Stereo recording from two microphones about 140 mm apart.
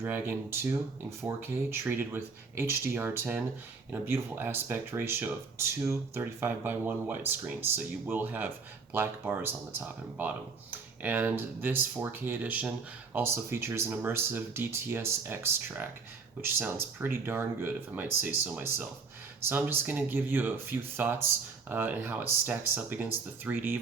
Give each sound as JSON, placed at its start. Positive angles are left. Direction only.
{"t": 0.0, "sound": "speech", "side_deg": -15}